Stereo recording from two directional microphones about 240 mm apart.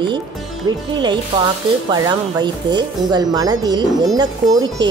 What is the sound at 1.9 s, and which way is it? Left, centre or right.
Speech, centre.